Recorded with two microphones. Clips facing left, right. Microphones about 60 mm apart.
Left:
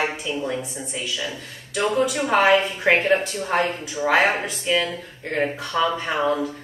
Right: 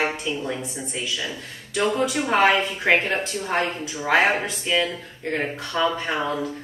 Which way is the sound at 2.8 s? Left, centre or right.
Centre.